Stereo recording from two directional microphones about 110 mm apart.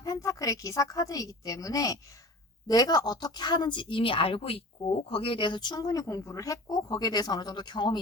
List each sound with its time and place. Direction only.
0.0 s a woman's voice: 30° left (ahead or behind)